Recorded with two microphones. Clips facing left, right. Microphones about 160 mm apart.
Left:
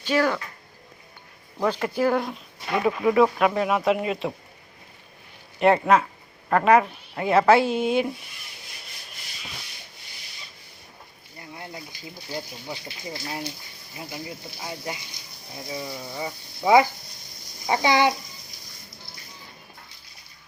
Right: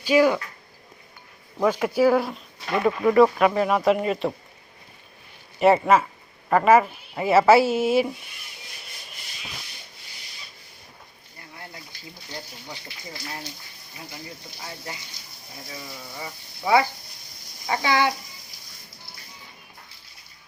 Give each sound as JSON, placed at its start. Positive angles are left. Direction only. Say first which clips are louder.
{"t": 0.0, "sound": "speech", "louder": "right 4 dB", "side_deg": -10}
{"t": 1.6, "sound": "speech", "louder": "right 3 dB", "side_deg": -10}
{"t": 5.5, "sound": "speech", "louder": "right 1 dB", "side_deg": 0}
{"t": 11.3, "sound": "a sound", "louder": "left 4 dB", "side_deg": 20}
{"t": 11.9, "sound": "speech", "louder": "left 5 dB", "side_deg": 10}